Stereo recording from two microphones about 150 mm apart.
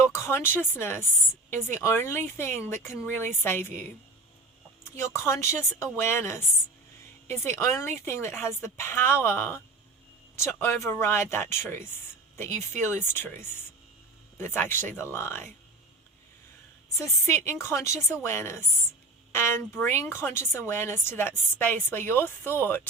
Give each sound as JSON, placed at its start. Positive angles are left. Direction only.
{"t": 0.1, "sound": "a woman's voice", "side_deg": 15}
{"t": 13.1, "sound": "a woman's voice", "side_deg": 15}
{"t": 17.4, "sound": "a woman's voice", "side_deg": 20}